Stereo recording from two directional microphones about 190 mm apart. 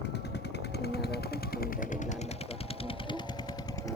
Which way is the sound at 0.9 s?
60° left (ahead or behind).